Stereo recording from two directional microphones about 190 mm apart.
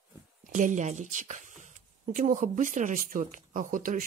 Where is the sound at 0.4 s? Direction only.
40° right (ahead or behind).